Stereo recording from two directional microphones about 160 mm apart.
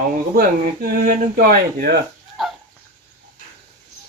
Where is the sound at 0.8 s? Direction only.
65° right (ahead or behind).